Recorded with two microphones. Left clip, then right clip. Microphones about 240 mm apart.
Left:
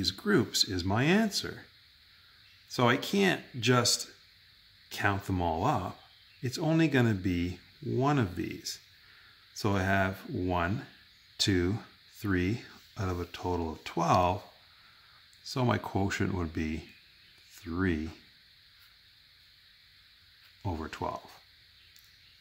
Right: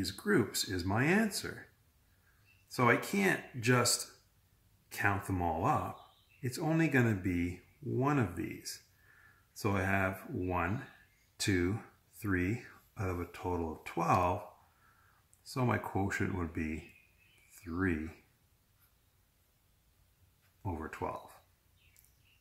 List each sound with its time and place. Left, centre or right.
0.0 s speech: left
2.7 s speech: left
15.4 s speech: left
20.6 s speech: left